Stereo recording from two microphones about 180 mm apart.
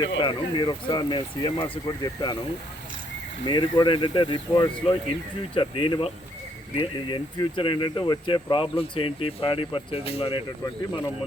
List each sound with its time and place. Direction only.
0.2 s speech: 25° left (ahead or behind)
3.4 s speech: 25° left (ahead or behind)